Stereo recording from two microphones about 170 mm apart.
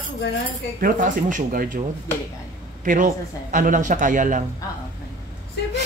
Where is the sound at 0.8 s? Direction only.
50° right (ahead or behind).